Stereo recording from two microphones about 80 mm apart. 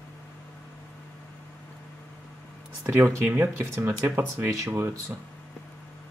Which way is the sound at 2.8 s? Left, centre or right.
Right.